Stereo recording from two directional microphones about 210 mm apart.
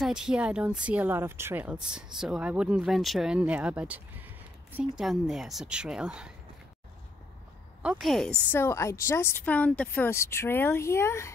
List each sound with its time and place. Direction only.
0.0 s speech: 5° right (ahead or behind)
7.8 s a woman's voice: 5° right (ahead or behind); by 11.3 s 15° left (ahead or behind)